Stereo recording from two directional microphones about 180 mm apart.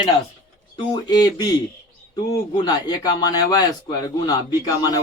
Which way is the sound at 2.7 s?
20° left (ahead or behind).